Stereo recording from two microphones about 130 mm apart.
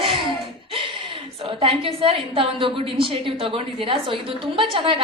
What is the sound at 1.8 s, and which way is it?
A woman's voice, 45° right (ahead or behind).